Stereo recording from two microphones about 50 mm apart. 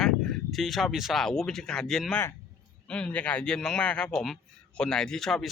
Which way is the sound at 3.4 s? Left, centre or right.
Centre.